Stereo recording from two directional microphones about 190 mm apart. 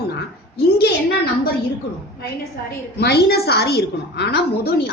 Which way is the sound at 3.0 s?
60° left (ahead or behind).